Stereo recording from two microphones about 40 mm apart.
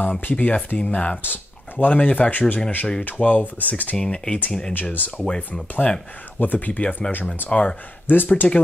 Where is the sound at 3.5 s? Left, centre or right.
Left.